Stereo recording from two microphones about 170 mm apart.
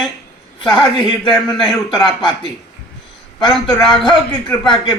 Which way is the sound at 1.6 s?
Centre (ahead or behind).